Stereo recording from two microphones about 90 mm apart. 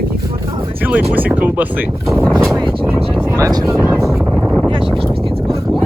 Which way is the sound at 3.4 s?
40° right (ahead or behind).